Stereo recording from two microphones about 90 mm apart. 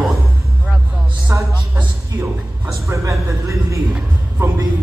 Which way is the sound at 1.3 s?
30° right (ahead or behind).